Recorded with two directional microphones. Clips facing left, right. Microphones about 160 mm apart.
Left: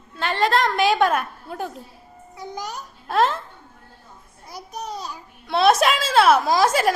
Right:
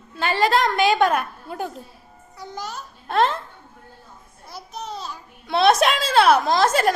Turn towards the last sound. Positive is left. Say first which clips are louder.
# even
turn(degrees=5)  # may be behind; listen again after turning